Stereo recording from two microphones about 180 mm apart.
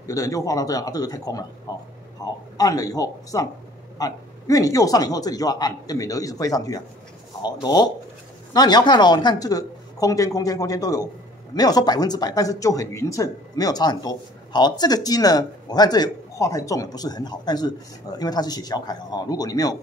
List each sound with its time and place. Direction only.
0.0 s speech: 20° left (ahead or behind)